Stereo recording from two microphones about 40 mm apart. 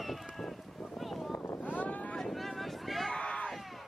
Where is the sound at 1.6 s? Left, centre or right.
Left.